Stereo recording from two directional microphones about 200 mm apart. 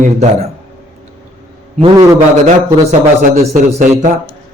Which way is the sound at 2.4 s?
35° right (ahead or behind).